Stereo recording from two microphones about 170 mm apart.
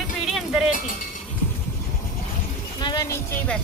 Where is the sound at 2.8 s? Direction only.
25° left (ahead or behind).